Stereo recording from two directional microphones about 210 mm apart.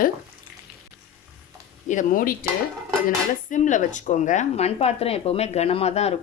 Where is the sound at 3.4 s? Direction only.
35° left (ahead or behind).